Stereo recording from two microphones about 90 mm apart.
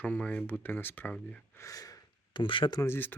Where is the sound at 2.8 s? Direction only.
25° left (ahead or behind).